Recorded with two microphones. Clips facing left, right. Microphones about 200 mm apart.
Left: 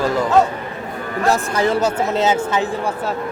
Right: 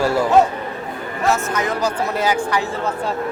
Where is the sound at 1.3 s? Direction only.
30° left (ahead or behind).